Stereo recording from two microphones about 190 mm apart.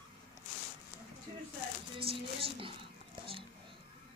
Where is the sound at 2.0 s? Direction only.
30° right (ahead or behind).